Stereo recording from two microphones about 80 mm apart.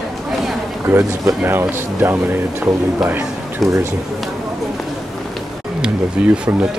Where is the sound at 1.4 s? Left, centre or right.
Right.